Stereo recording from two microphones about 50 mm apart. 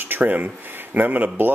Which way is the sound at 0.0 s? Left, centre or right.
Right.